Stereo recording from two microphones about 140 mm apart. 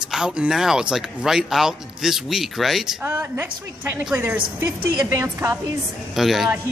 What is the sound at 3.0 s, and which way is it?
A woman's voice, 15° right (ahead or behind).